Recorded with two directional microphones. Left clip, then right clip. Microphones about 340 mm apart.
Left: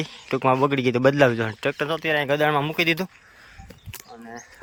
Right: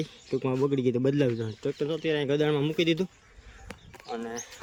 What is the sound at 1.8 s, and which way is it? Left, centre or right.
Speech, centre.